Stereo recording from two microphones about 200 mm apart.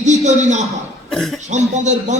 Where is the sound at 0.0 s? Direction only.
35° right (ahead or behind).